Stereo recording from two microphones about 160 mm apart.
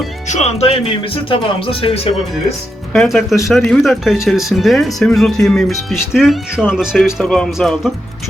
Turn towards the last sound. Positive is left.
turn(degrees=0)  # may be behind; listen again after turning